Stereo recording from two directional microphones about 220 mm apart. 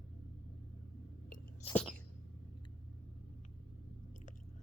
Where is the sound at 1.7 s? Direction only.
Centre (ahead or behind).